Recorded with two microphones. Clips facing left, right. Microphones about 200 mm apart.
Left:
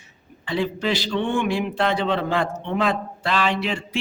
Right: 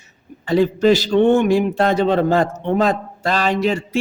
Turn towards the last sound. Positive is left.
turn(degrees=-40)  # may be behind; listen again after turning